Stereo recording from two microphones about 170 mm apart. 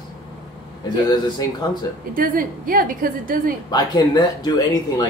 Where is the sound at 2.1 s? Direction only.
55° right (ahead or behind).